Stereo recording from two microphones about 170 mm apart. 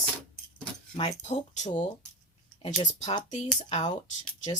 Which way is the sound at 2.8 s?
30° left (ahead or behind).